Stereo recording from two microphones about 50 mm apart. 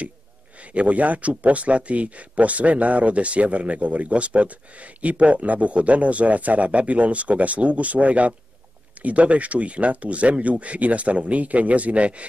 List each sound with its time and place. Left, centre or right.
0.6 s speech: right